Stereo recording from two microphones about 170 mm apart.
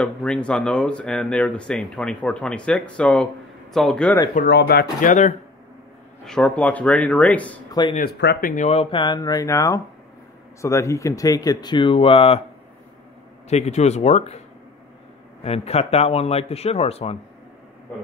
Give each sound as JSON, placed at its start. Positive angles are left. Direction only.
{"t": 0.0, "sound": "speech", "side_deg": 5}
{"t": 4.5, "sound": "speech", "side_deg": 75}
{"t": 6.2, "sound": "speech", "side_deg": 5}
{"t": 8.0, "sound": "speech", "side_deg": 80}
{"t": 8.4, "sound": "speech", "side_deg": 50}
{"t": 13.5, "sound": "speech", "side_deg": 40}
{"t": 15.4, "sound": "speech", "side_deg": 40}